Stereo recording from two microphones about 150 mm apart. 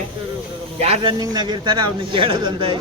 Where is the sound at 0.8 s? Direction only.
45° right (ahead or behind).